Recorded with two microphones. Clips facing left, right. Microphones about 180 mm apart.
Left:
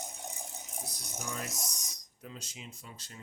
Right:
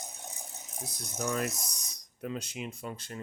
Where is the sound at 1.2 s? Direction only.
65° right (ahead or behind).